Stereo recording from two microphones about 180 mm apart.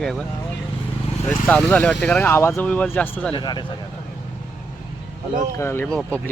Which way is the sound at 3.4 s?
25° left (ahead or behind).